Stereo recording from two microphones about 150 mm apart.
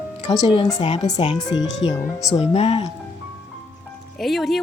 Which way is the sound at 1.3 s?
25° left (ahead or behind).